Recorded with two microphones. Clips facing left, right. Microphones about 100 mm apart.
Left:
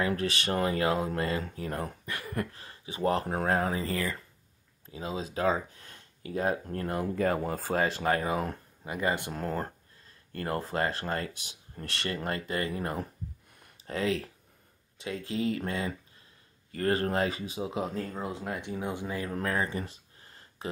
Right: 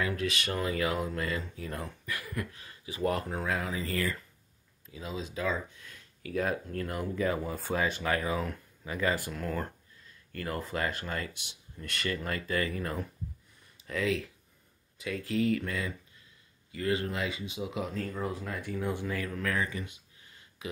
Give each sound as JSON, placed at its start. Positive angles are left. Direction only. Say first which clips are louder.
{"t": 0.2, "sound": "speech", "louder": "left 3 dB", "side_deg": 35}
{"t": 1.4, "sound": "speech", "louder": "left 4 dB", "side_deg": 55}
{"t": 2.0, "sound": "speech", "louder": "left 3 dB", "side_deg": 30}
{"t": 3.3, "sound": "speech", "louder": "left 5 dB", "side_deg": 45}
{"t": 6.8, "sound": "speech", "louder": "left 3 dB", "side_deg": 40}
{"t": 8.8, "sound": "speech", "louder": "even", "side_deg": 20}
{"t": 9.3, "sound": "speech", "louder": "left 2 dB", "side_deg": 35}
{"t": 16.7, "sound": "speech", "louder": "left 4 dB", "side_deg": 45}
{"t": 19.3, "sound": "a sound", "louder": "left 5 dB", "side_deg": 35}